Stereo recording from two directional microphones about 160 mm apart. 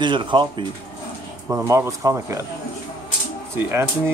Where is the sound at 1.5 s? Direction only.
15° right (ahead or behind).